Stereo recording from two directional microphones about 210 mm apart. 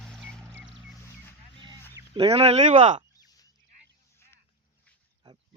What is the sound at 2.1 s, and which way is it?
Speech, 30° right (ahead or behind).